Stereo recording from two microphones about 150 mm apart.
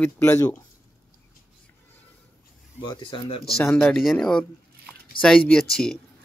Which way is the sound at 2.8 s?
30° left (ahead or behind).